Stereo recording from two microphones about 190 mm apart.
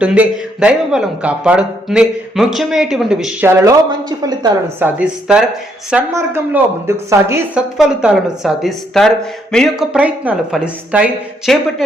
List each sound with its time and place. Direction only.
0.0 s speech: 5° right (ahead or behind)
4.2 s a woman's voice: 20° right (ahead or behind)
4.9 s speech: 5° right (ahead or behind)
7.8 s speech: 5° right (ahead or behind)